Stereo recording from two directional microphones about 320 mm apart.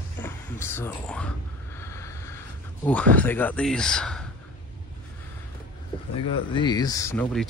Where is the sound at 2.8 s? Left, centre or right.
Centre.